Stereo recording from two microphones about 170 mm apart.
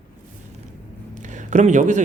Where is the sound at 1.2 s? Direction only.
45° right (ahead or behind).